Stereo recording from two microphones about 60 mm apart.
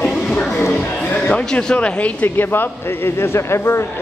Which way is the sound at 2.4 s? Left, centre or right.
Left.